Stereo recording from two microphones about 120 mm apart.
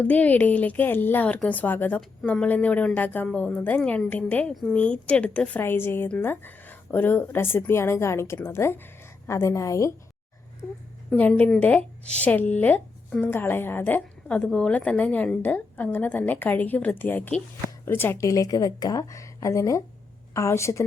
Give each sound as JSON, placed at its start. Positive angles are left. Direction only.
{"t": 0.0, "sound": "a woman's voice", "side_deg": 10}
{"t": 11.1, "sound": "a woman's voice", "side_deg": 10}
{"t": 18.2, "sound": "a woman's voice", "side_deg": 30}